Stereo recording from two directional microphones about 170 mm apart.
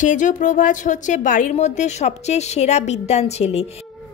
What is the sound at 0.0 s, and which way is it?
A woman's voice, 50° left (ahead or behind).